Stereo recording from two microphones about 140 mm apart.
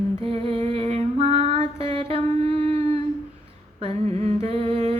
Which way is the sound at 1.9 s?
45° right (ahead or behind).